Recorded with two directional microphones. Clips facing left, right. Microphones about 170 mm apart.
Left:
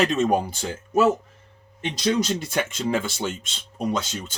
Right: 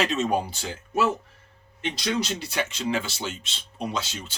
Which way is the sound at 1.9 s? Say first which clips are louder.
Left 6 dB; 45° left (ahead or behind).